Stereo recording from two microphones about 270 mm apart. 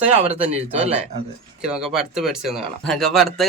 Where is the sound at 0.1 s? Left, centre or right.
Right.